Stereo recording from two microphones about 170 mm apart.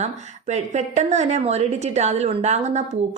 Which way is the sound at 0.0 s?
40° right (ahead or behind).